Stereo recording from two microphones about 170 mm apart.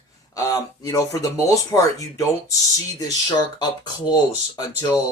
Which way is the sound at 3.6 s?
25° left (ahead or behind).